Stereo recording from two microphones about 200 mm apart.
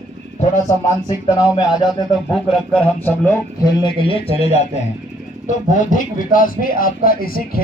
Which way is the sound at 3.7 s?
25° left (ahead or behind).